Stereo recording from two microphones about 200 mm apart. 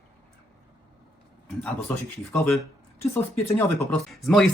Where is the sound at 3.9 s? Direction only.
Centre (ahead or behind).